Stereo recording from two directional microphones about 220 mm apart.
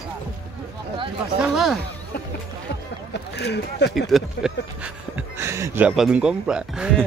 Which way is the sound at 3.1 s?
50° left (ahead or behind).